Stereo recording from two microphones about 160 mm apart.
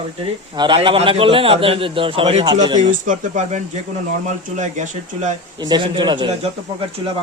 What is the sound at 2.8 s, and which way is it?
Speech, 50° right (ahead or behind).